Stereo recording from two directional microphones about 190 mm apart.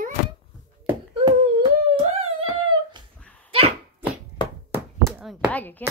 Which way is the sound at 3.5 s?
30° right (ahead or behind).